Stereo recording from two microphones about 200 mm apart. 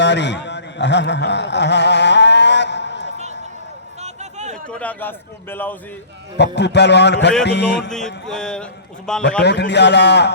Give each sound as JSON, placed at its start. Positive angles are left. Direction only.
{"t": 0.0, "sound": "a sound", "side_deg": 60}
{"t": 4.0, "sound": "a sound", "side_deg": -35}
{"t": 4.5, "sound": "a man's voice", "side_deg": 5}
{"t": 6.3, "sound": "a man's voice", "side_deg": 60}
{"t": 7.8, "sound": "music", "side_deg": 5}
{"t": 9.4, "sound": "a man's voice", "side_deg": 60}